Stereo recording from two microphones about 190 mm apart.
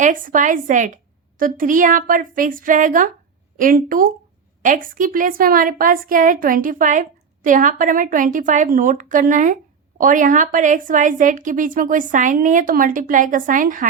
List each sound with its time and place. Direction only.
0.0 s a woman's voice: 45° right (ahead or behind)